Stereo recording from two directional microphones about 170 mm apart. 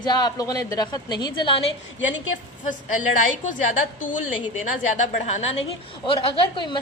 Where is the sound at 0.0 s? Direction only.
25° left (ahead or behind).